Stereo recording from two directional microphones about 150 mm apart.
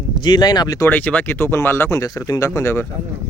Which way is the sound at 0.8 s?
10° left (ahead or behind).